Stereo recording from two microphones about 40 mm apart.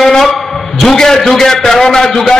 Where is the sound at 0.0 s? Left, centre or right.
Centre.